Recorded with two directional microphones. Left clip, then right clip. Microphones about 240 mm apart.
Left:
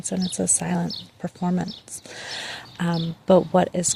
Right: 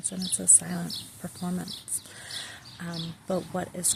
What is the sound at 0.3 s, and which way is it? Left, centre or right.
Speech, left.